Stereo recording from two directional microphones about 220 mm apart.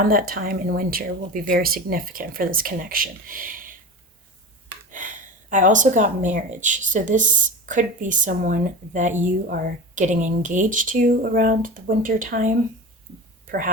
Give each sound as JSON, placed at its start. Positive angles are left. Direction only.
{"t": 0.0, "sound": "a woman's voice", "side_deg": -40}
{"t": 4.9, "sound": "a woman's voice", "side_deg": -35}